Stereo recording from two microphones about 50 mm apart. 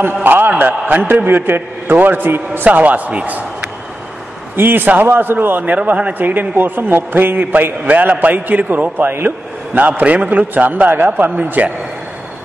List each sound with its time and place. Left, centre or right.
0.0 s a man's voice: right
0.5 s a man's voice: right
2.6 s a man's voice: right
4.6 s a man's voice: right
9.8 s a man's voice: right